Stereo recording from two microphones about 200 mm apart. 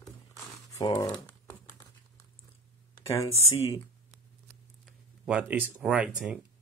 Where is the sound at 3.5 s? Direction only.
25° left (ahead or behind).